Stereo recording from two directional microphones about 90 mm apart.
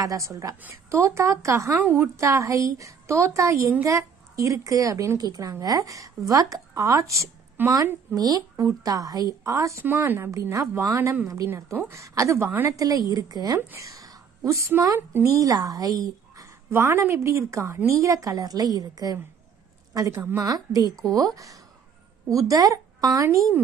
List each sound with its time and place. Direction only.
0.0 s a woman's voice: 40° right (ahead or behind)
1.8 s a woman's voice: 20° right (ahead or behind)
2.1 s a woman's voice: 35° right (ahead or behind)
7.6 s a woman's voice: 20° right (ahead or behind)
8.1 s a woman's voice: 45° right (ahead or behind)
9.8 s a woman's voice: 25° right (ahead or behind)
12.4 s a woman's voice: 20° right (ahead or behind)
12.7 s a woman's voice: 40° right (ahead or behind)
13.7 s a sound: 40° right (ahead or behind)
15.2 s a woman's voice: 40° right (ahead or behind)
22.3 s speech: 40° right (ahead or behind)